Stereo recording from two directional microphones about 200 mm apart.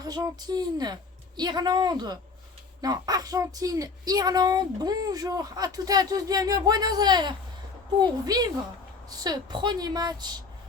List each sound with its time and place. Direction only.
0.0 s speech: 20° right (ahead or behind)